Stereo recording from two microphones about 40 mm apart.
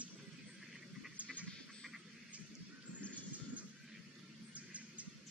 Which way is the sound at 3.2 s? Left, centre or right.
Right.